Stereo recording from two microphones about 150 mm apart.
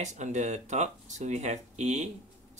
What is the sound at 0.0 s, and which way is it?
Speech, 50° right (ahead or behind).